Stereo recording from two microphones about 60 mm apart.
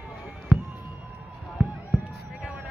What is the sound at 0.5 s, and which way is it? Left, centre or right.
Fireworks, right.